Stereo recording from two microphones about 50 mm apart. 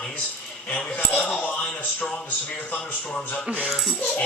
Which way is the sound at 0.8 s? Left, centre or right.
Left.